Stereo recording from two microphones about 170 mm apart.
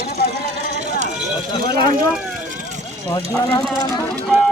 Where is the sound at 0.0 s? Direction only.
65° left (ahead or behind).